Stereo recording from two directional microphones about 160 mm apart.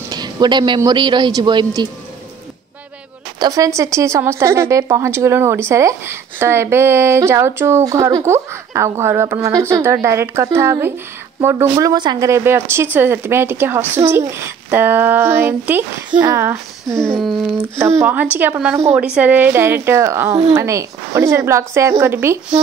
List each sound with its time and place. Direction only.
0.1 s speech: 25° right (ahead or behind)
3.3 s speech: 20° right (ahead or behind)
16.1 s speech: 25° right (ahead or behind)
16.3 s speech: 15° right (ahead or behind)
16.9 s a sound: 5° left (ahead or behind)
17.7 s speech: 15° right (ahead or behind)